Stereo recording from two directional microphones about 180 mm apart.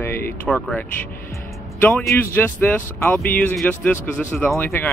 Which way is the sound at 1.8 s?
10° left (ahead or behind).